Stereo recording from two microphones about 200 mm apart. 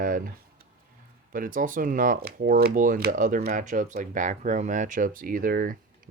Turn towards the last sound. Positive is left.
turn(degrees=-45)  # may be behind; listen again after turning